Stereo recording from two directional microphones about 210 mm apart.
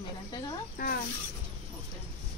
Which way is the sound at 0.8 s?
40° left (ahead or behind).